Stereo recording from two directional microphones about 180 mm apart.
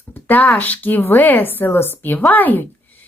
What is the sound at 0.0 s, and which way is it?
Speech, 10° left (ahead or behind).